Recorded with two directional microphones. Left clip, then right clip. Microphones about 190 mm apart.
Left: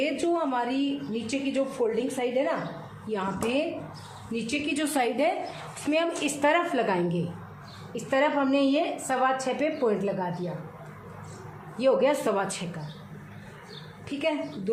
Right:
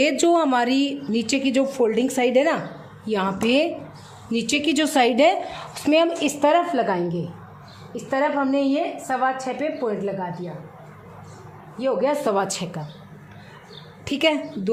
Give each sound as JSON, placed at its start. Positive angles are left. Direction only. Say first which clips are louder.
{"t": 0.0, "sound": "a woman's voice", "louder": "right 8 dB", "side_deg": -55}
{"t": 11.8, "sound": "a woman's voice", "louder": "right 1 dB", "side_deg": -20}
{"t": 12.2, "sound": "a woman's voice", "louder": "right 5 dB", "side_deg": -40}
{"t": 14.0, "sound": "a woman's voice", "louder": "right 8 dB", "side_deg": -60}